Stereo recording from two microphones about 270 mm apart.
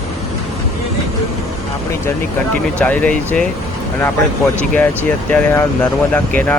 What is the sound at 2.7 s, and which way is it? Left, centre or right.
Speech, centre.